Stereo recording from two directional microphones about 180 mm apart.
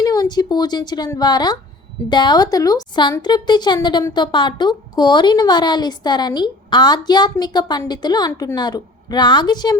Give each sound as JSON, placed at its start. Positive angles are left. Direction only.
{"t": 0.0, "sound": "a woman's voice", "side_deg": 20}